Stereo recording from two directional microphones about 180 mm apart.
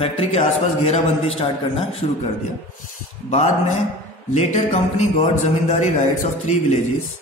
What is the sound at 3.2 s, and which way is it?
A man's voice, 35° left (ahead or behind).